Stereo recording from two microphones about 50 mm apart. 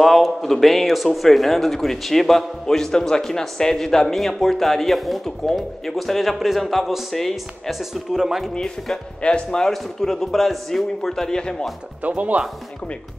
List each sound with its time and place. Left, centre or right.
0.0 s speech: centre
7.9 s speech: centre
8.5 s speech: centre
9.7 s speech: centre
12.0 s speech: right